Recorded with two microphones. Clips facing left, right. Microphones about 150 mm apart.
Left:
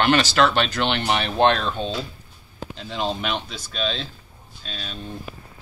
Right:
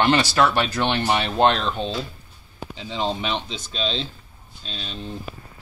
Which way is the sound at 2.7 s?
15° right (ahead or behind).